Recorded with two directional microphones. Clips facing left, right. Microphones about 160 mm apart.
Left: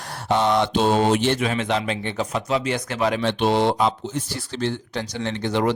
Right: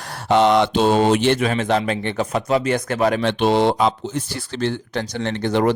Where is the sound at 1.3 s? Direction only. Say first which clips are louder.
Right 4 dB; 50° right (ahead or behind).